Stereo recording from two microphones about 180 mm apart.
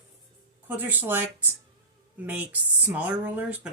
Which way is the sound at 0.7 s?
10° right (ahead or behind).